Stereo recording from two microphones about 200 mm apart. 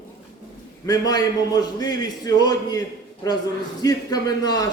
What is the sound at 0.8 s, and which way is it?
A man's voice, 20° left (ahead or behind).